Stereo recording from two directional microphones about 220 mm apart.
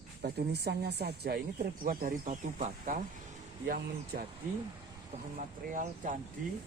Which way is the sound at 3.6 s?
40° right (ahead or behind).